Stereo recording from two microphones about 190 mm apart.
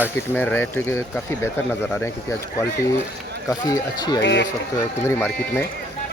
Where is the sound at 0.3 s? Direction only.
10° left (ahead or behind).